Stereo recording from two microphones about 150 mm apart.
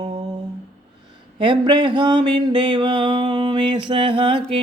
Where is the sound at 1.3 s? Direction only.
30° right (ahead or behind).